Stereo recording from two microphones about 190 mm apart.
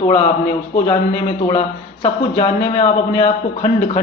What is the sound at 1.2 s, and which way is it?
Speech, 30° left (ahead or behind).